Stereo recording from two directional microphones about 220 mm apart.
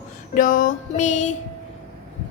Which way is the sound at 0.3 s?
40° left (ahead or behind).